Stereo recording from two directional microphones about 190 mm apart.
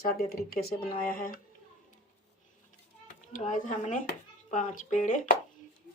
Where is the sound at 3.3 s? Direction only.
40° left (ahead or behind).